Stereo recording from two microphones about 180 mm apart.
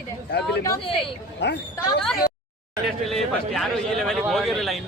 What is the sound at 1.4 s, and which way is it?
Speech, 70° left (ahead or behind).